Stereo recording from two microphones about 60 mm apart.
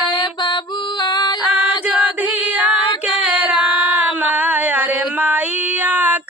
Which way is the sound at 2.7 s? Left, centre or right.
Centre.